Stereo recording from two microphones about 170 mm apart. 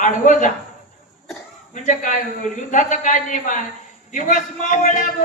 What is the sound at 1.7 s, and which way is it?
A man's voice, 45° left (ahead or behind).